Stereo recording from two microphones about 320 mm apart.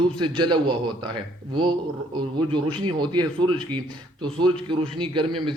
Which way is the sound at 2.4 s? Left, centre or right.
Centre.